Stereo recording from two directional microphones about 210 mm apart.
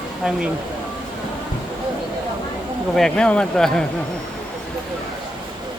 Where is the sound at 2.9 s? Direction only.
5° left (ahead or behind).